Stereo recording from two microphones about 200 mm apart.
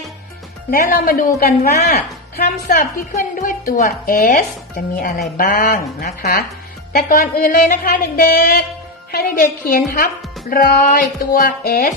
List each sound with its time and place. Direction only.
0.7 s a woman's voice: 45° left (ahead or behind)